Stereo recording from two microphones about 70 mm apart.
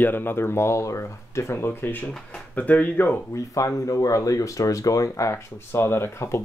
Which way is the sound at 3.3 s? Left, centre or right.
Left.